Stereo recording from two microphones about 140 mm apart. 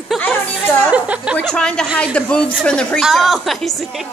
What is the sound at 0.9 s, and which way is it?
Speech, 10° right (ahead or behind).